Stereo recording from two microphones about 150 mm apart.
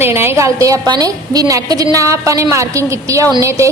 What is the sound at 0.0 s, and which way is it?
A woman's voice, 15° right (ahead or behind).